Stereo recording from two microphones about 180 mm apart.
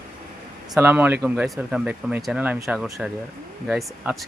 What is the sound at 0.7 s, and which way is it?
Speech, 10° right (ahead or behind).